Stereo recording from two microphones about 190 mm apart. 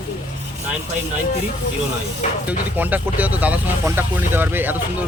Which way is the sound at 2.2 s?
35° left (ahead or behind).